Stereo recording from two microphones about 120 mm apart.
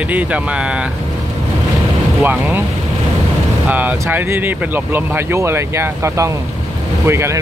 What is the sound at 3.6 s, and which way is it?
Speech, 15° right (ahead or behind).